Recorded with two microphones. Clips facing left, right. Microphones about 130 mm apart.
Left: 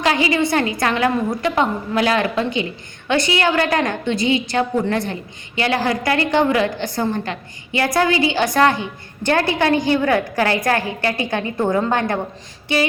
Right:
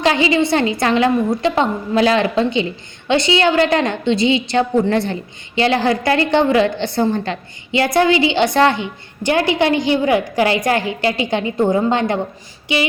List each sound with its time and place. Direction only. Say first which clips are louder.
0.2 s a woman's voice: right 3 dB; 25° right (ahead or behind)